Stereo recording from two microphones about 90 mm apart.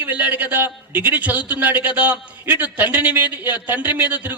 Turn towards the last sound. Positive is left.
turn(degrees=-20)  # may be behind; listen again after turning